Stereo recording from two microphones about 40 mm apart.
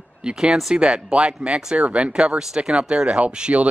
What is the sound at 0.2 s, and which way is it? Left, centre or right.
Speech, right.